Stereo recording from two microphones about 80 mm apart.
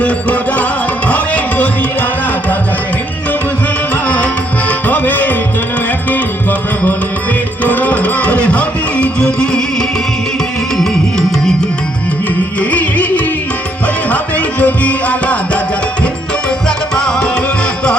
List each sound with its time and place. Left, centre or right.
0.0 s music: centre
4.0 s music: left
12.5 s music: centre
16.6 s music: centre